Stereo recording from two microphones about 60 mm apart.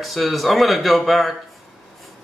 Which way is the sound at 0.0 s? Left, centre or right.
Centre.